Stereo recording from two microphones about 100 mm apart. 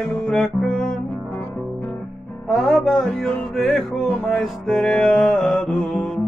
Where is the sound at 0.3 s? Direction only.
Centre (ahead or behind).